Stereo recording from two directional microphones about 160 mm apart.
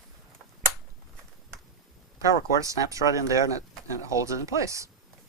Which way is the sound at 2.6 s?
20° right (ahead or behind).